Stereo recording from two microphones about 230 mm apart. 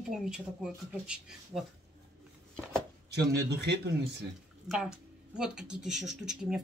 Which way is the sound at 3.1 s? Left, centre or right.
Right.